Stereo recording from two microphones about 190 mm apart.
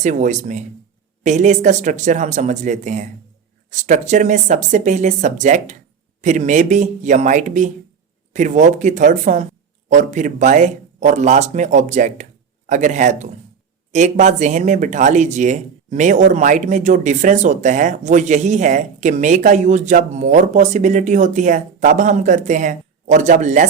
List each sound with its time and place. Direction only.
0.0 s speech: 40° right (ahead or behind)